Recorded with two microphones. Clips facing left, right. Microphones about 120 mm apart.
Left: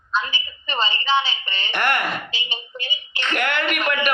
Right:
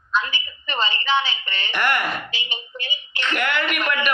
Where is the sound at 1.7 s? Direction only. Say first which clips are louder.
Even; 35° left (ahead or behind).